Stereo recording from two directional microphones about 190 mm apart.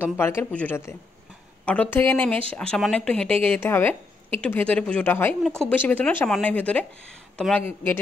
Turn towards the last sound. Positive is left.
turn(degrees=10)  # may be behind; listen again after turning